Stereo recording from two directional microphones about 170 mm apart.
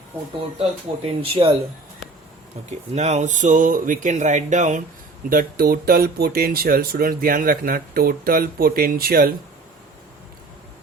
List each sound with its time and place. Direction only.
1.2 s speech: 35° right (ahead or behind)
2.6 s speech: 40° right (ahead or behind)
5.3 s speech: 55° right (ahead or behind)